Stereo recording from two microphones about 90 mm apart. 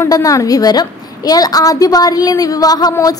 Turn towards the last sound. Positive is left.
turn(degrees=45)  # may be behind; listen again after turning